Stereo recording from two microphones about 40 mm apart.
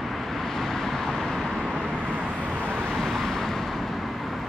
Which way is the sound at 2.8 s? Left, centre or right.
Centre.